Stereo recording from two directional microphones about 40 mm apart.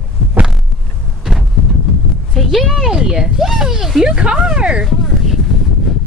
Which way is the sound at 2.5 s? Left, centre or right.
Centre.